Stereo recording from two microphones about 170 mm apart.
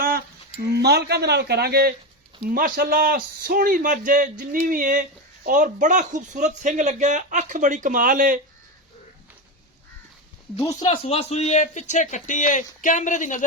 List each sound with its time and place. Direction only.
0.0 s a sound: 65° right (ahead or behind)
0.8 s a man's voice: 75° right (ahead or behind); by 8.4 s 50° right (ahead or behind)
10.9 s speech: 35° left (ahead or behind)